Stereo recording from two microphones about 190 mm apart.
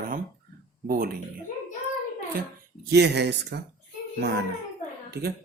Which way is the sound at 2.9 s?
60° right (ahead or behind).